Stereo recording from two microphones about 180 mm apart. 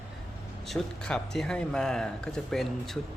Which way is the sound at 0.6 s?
5° left (ahead or behind).